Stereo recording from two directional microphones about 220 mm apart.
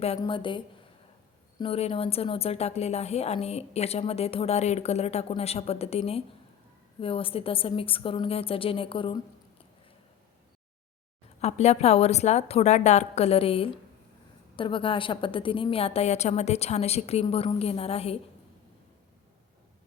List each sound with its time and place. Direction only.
0.0 s a woman's voice: 25° left (ahead or behind)
11.3 s a woman's voice: 30° left (ahead or behind)